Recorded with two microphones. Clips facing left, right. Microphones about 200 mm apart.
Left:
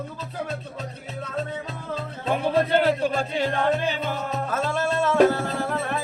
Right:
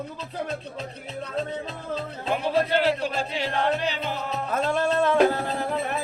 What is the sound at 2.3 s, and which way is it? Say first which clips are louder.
Music: left 2 dB; 50° left (ahead or behind).